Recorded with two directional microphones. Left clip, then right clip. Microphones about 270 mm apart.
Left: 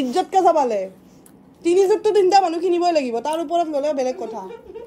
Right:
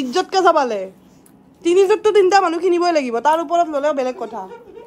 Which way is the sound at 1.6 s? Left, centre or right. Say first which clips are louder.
Right 2 dB; centre.